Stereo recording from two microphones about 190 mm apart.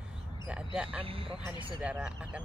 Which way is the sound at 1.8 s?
5° right (ahead or behind).